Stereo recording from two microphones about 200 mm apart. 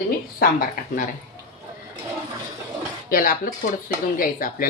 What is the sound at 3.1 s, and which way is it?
Speech, 45° left (ahead or behind).